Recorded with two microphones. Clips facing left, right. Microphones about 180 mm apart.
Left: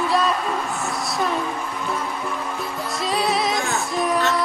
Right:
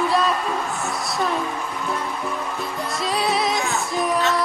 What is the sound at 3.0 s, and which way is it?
Music, centre (ahead or behind).